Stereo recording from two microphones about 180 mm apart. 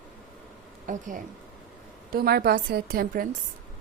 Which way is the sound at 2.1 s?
60° right (ahead or behind).